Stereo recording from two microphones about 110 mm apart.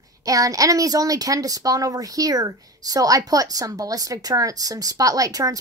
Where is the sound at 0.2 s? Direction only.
30° right (ahead or behind).